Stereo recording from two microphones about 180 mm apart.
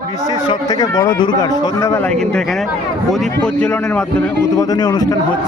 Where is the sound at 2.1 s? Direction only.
5° left (ahead or behind).